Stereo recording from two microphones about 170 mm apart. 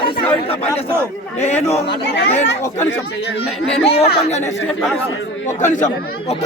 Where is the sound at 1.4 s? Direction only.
40° left (ahead or behind).